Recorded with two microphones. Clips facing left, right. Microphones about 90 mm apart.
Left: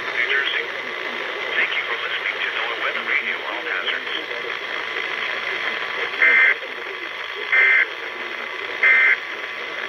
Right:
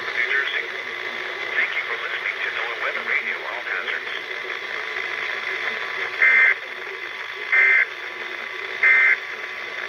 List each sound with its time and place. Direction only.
0.2 s radio: 10° right (ahead or behind)
1.5 s radio: 10° right (ahead or behind)
5.9 s radio: 5° right (ahead or behind)
7.5 s radio: centre (ahead or behind)
8.8 s a sound: centre (ahead or behind)